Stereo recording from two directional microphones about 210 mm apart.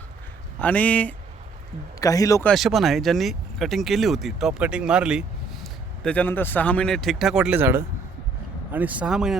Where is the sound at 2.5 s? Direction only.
Centre (ahead or behind).